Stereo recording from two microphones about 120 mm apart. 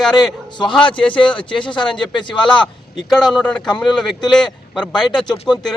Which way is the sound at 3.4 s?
10° left (ahead or behind).